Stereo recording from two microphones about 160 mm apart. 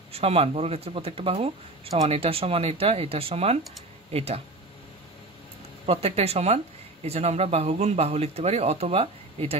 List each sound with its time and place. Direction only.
0.1 s speech: 35° right (ahead or behind)
5.9 s speech: 40° right (ahead or behind)